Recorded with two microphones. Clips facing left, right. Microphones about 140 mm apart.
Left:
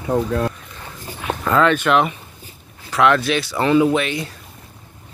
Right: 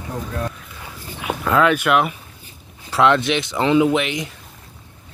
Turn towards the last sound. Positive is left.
turn(degrees=-15)  # may be behind; listen again after turning